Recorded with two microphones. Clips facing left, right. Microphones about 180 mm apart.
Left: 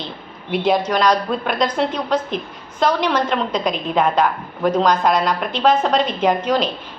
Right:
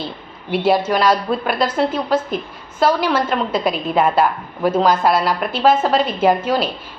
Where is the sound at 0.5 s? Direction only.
5° right (ahead or behind).